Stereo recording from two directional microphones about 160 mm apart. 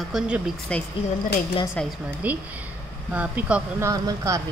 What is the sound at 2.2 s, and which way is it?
Speech, 10° right (ahead or behind).